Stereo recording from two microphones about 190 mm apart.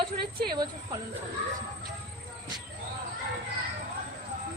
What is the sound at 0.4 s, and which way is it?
Speech, 20° right (ahead or behind).